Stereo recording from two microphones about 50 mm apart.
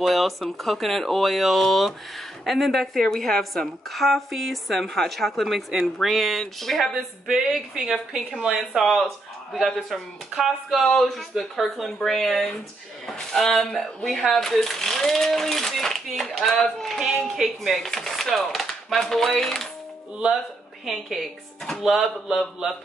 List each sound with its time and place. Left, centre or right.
0.0 s speech: centre
7.2 s speech: centre
10.3 s speech: centre
10.8 s speech: centre
20.8 s speech: centre